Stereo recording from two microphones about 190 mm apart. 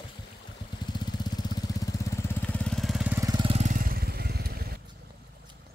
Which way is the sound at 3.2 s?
25° right (ahead or behind).